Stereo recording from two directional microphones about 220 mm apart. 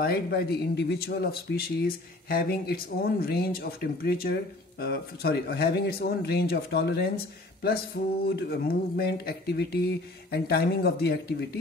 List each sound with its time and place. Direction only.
0.0 s speech: 45° left (ahead or behind)